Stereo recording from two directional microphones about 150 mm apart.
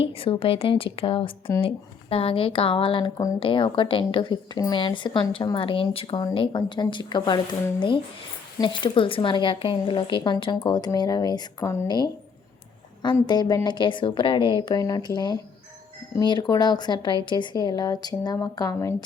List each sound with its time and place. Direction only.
0.0 s speech: 40° left (ahead or behind); by 11.9 s 20° left (ahead or behind)
13.2 s speech: 25° left (ahead or behind)